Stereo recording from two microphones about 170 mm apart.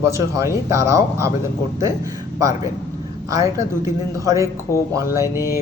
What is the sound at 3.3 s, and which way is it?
Speech, 20° right (ahead or behind).